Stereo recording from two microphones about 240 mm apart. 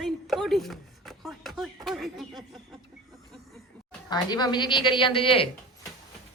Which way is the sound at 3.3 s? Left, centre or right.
Centre.